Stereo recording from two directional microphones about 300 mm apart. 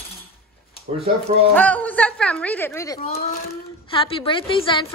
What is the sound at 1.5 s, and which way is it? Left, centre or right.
A woman's voice, centre.